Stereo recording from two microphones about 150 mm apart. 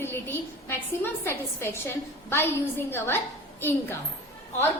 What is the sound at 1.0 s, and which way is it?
A woman's voice, 15° left (ahead or behind).